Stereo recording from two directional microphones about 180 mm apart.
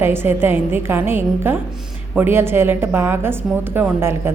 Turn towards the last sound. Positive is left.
turn(degrees=-15)  # may be behind; listen again after turning